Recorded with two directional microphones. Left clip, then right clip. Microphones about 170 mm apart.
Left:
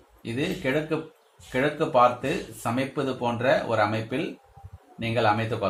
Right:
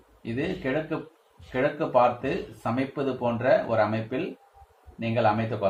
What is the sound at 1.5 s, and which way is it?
Speech, 30° left (ahead or behind).